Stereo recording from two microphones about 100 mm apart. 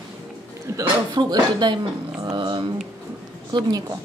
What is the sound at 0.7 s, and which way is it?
Speech, 45° right (ahead or behind).